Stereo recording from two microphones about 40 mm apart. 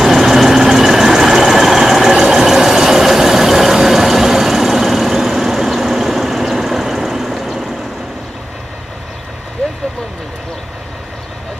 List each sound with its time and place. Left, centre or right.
0.0 s vehicle: centre